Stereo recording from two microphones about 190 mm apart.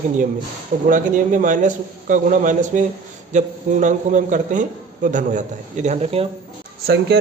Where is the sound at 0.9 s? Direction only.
45° right (ahead or behind).